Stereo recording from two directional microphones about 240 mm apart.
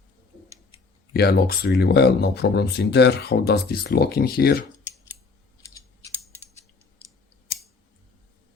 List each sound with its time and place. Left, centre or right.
1.1 s speech: left